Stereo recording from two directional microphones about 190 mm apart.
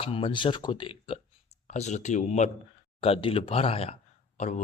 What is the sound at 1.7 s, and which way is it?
A man's voice, 40° left (ahead or behind).